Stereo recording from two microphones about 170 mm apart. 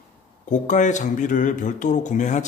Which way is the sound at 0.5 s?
45° left (ahead or behind).